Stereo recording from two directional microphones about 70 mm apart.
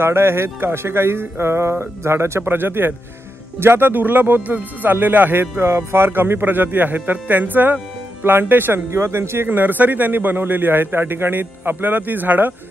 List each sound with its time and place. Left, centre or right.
0.0 s speech: right
8.9 s speech: right